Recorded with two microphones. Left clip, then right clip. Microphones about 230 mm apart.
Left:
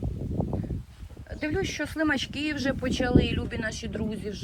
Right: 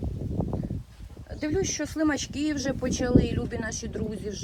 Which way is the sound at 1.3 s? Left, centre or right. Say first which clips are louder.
Right 1 dB; centre.